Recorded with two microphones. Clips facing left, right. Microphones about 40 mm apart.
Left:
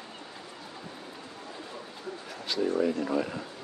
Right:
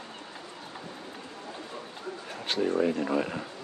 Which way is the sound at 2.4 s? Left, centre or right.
Right.